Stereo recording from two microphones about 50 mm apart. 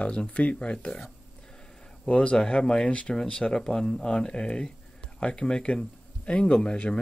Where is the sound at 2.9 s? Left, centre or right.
Left.